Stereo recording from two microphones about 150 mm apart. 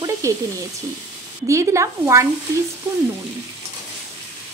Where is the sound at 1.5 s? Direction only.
20° right (ahead or behind).